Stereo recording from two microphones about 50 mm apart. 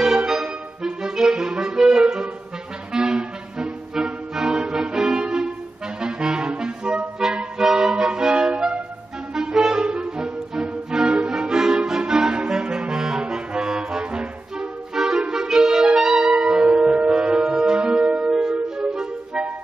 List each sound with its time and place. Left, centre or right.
0.0 s clarinet: centre
2.9 s music: centre
5.9 s clarinet: centre
7.3 s music: centre